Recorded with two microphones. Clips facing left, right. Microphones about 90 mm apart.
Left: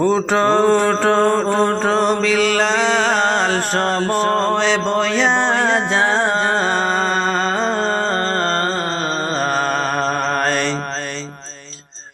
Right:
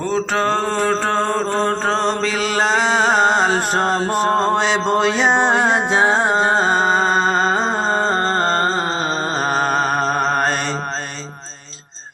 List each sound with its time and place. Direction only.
0.0 s mantra: 15° left (ahead or behind); by 10.8 s 5° right (ahead or behind)